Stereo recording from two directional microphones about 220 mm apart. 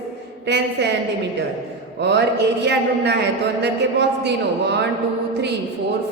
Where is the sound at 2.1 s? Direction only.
50° right (ahead or behind).